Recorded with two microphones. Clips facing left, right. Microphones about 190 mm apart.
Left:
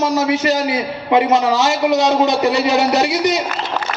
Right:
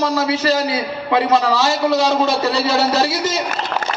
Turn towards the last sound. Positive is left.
turn(degrees=20)  # may be behind; listen again after turning